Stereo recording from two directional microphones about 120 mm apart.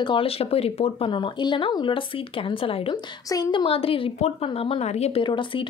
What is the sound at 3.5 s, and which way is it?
Speech, 45° left (ahead or behind).